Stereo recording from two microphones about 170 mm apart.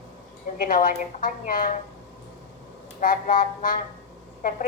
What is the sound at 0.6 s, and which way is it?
A woman's voice, 55° left (ahead or behind).